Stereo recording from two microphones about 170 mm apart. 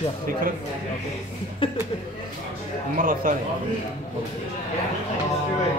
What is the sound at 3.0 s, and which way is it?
Speech, 55° right (ahead or behind).